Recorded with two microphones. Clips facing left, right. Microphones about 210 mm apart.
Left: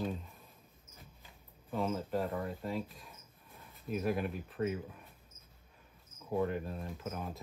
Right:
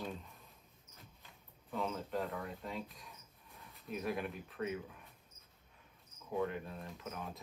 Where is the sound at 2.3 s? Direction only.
30° left (ahead or behind).